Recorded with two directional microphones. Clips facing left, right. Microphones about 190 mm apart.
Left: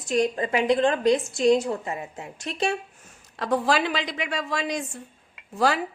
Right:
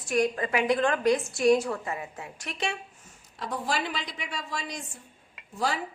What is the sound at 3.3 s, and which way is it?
A woman's voice, 90° left.